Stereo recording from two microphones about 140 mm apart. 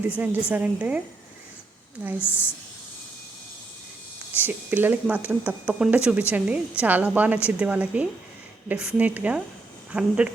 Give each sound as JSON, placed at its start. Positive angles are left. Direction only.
{"t": 0.1, "sound": "speech", "side_deg": -10}
{"t": 2.1, "sound": "a woman's voice", "side_deg": 15}
{"t": 4.4, "sound": "speech", "side_deg": -15}